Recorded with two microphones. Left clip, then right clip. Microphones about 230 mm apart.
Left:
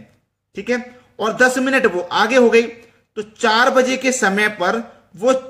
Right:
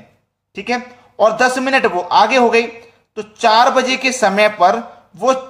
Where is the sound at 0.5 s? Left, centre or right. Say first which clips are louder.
Right 1 dB; centre.